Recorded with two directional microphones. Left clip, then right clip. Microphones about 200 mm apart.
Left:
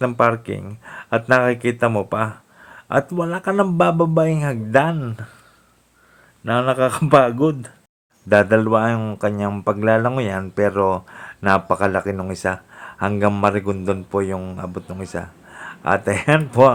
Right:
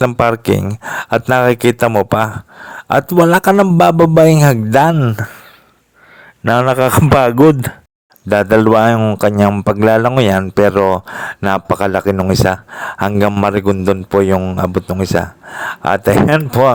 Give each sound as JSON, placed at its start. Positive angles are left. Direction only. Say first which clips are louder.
{"t": 0.0, "sound": "speech", "louder": "right 5 dB", "side_deg": -55}
{"t": 6.4, "sound": "speech", "louder": "right 6 dB", "side_deg": -50}